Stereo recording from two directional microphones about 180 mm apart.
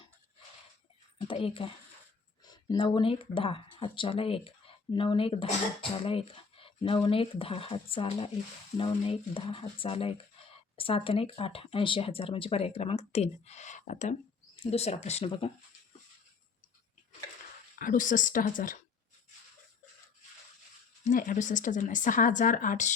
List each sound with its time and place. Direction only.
1.3 s speech: 30° left (ahead or behind)
17.7 s speech: 50° left (ahead or behind)
21.0 s speech: 45° left (ahead or behind)